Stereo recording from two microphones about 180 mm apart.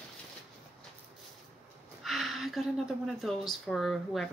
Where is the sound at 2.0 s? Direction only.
Centre (ahead or behind).